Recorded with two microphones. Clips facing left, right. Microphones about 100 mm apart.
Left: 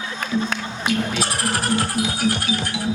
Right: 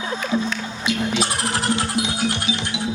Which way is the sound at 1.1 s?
20° right (ahead or behind).